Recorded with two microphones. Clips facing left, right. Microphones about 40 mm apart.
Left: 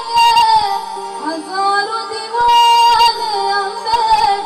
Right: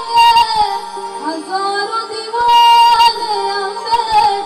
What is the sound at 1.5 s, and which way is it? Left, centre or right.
Child singing, right.